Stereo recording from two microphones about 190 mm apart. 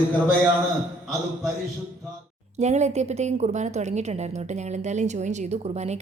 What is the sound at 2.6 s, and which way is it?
A woman's voice, 35° right (ahead or behind).